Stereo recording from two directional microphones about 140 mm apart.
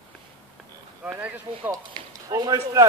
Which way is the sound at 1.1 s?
10° right (ahead or behind).